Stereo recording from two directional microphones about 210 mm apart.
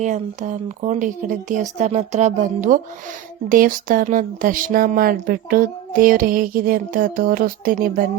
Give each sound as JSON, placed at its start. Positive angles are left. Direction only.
{"t": 0.0, "sound": "speech", "side_deg": -35}